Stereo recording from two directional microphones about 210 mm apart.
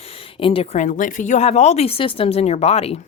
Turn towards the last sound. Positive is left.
turn(degrees=30)  # may be behind; listen again after turning